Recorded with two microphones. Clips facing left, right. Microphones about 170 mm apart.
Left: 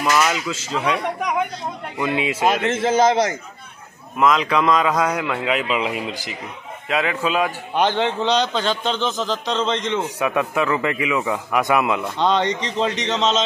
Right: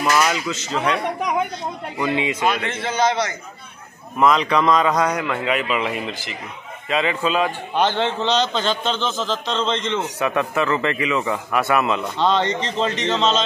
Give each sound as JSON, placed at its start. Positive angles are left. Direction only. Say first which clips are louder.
{"t": 0.0, "sound": "speech", "louder": "even", "side_deg": -10}
{"t": 0.3, "sound": "a man's voice", "louder": "even", "side_deg": 5}
{"t": 2.0, "sound": "a man's voice", "louder": "even", "side_deg": 5}
{"t": 2.7, "sound": "a man's voice", "louder": "left 4 dB", "side_deg": 45}
{"t": 4.2, "sound": "a man's voice", "louder": "right 1 dB", "side_deg": 0}